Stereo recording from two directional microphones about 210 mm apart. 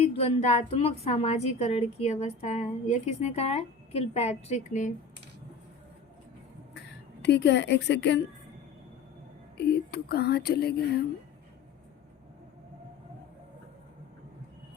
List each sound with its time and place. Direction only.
0.0 s a woman's voice: 30° left (ahead or behind)
6.7 s speech: 55° left (ahead or behind)
9.6 s speech: 50° left (ahead or behind)